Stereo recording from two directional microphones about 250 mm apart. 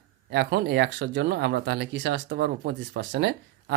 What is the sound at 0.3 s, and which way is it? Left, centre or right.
Speech, right.